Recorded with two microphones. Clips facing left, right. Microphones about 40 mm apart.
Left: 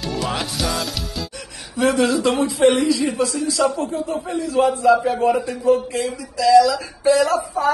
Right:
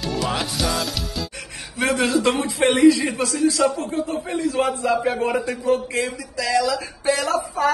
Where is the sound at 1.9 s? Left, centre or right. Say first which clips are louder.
Left 2 dB; right.